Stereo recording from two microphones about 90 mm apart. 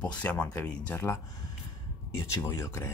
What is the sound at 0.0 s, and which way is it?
Speech, 15° left (ahead or behind).